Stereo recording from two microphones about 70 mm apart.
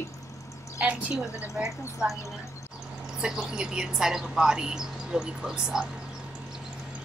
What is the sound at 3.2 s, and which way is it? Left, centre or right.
A woman's voice, centre.